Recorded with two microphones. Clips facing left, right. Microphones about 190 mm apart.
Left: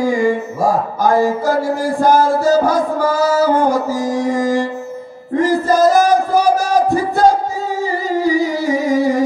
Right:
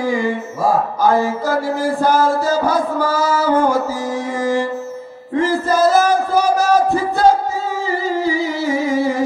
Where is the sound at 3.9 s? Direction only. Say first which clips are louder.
Left 5 dB; 15° left (ahead or behind).